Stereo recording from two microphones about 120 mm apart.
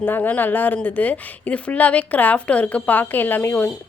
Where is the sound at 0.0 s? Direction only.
15° left (ahead or behind).